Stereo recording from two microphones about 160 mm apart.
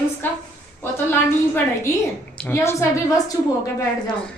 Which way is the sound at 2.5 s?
15° left (ahead or behind).